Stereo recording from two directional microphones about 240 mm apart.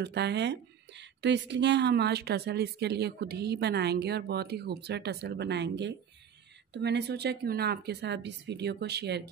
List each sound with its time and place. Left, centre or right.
0.0 s speech: right